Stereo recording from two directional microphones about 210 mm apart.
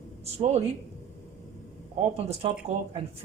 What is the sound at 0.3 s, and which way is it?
Speech, 30° right (ahead or behind).